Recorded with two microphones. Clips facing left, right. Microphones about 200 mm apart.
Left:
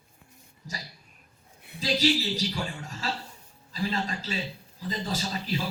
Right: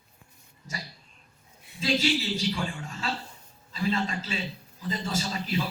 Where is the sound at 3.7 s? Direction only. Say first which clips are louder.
Right 2 dB; 35° left (ahead or behind).